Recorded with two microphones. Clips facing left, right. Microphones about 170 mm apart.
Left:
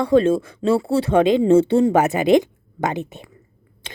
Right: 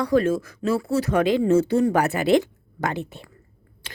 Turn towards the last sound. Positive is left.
turn(degrees=20)  # may be behind; listen again after turning